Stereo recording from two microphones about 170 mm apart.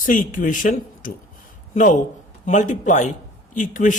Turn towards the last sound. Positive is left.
turn(degrees=50)  # may be behind; listen again after turning